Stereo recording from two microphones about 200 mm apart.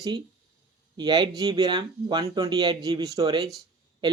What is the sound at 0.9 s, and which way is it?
Speech, 20° right (ahead or behind).